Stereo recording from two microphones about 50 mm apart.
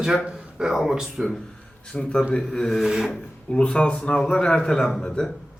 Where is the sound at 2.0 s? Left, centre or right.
Centre.